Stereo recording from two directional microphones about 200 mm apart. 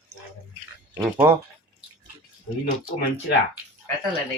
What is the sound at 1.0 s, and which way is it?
Speech, 10° right (ahead or behind).